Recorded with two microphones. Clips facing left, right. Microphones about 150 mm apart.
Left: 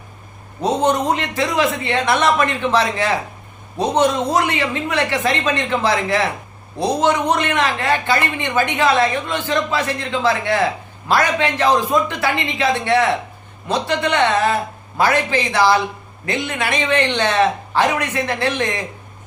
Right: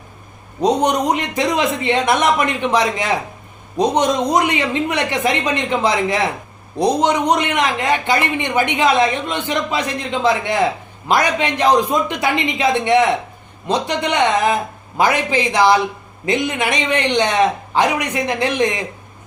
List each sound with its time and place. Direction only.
0.6 s a man's voice: 15° right (ahead or behind)